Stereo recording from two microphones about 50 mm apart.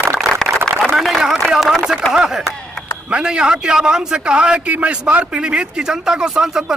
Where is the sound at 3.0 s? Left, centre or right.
Right.